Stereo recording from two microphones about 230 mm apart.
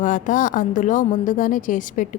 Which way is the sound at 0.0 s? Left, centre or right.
Left.